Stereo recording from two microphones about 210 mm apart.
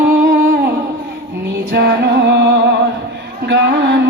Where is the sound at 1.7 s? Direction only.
50° right (ahead or behind).